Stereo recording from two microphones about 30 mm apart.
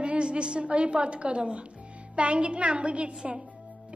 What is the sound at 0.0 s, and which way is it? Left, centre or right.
A woman's voice, right.